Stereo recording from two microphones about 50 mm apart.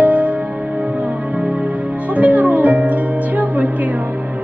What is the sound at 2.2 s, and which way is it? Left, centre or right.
Music, right.